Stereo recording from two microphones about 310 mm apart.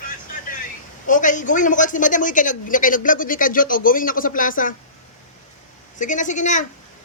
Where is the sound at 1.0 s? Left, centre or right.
Left.